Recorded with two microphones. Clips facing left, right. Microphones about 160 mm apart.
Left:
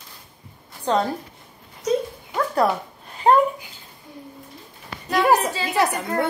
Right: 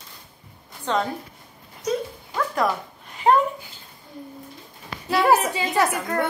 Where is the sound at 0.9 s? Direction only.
35° left (ahead or behind).